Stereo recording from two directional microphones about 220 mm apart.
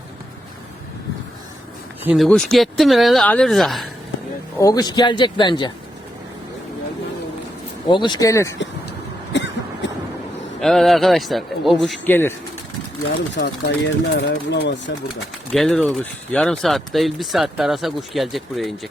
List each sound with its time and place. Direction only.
2.0 s speech: centre (ahead or behind)
4.5 s speech: 15° left (ahead or behind)
7.9 s speech: 20° left (ahead or behind)
9.3 s cough: 55° left (ahead or behind)
10.6 s speech: centre (ahead or behind)
13.3 s speech: 50° left (ahead or behind)
15.5 s speech: centre (ahead or behind)